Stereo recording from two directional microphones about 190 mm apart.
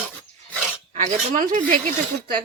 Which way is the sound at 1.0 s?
45° right (ahead or behind).